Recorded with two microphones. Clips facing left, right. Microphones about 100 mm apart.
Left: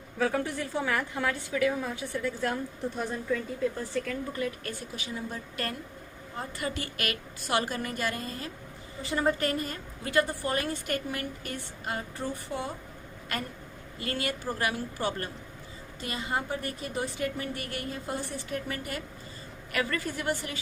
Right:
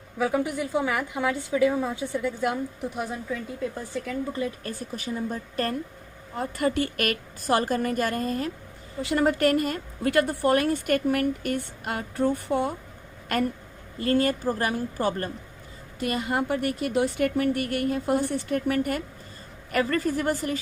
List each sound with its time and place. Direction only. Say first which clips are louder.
0.2 s a woman's voice: right 3 dB; 10° right (ahead or behind)
4.3 s speech: right 3 dB; 25° right (ahead or behind)
4.8 s speech: right 6 dB; 40° right (ahead or behind)
6.4 s a woman's voice: right 9 dB; 55° right (ahead or behind)
9.0 s a woman's voice: right 5 dB; 75° right (ahead or behind); by 12.7 s 55° right (ahead or behind)
14.0 s speech: right 10 dB; 40° right (ahead or behind)
16.0 s a woman's voice: right 6 dB; 55° right (ahead or behind)
19.7 s speech: right 7 dB; 40° right (ahead or behind)